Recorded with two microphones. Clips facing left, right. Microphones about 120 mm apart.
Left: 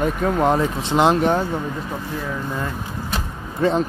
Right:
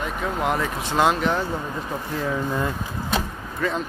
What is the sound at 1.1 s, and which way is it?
Speech, 45° left (ahead or behind).